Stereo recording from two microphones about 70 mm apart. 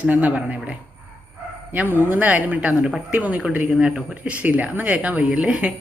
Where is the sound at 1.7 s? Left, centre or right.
Right.